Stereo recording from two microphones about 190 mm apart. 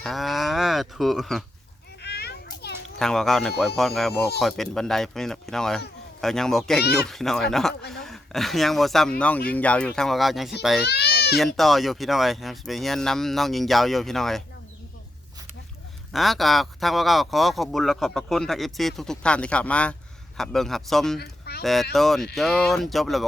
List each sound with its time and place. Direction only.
0.0 s livestock: centre (ahead or behind)
2.0 s children playing: 60° left (ahead or behind)
3.0 s speech: centre (ahead or behind)
10.8 s baby cry: 60° left (ahead or behind)
11.3 s speech: centre (ahead or behind)
16.1 s speech: centre (ahead or behind)
21.2 s a sound: 55° left (ahead or behind)
21.6 s speech: centre (ahead or behind)